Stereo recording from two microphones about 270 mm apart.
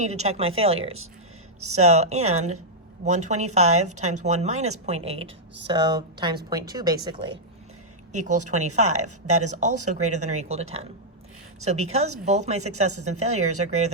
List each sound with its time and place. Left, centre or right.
0.0 s a woman's voice: right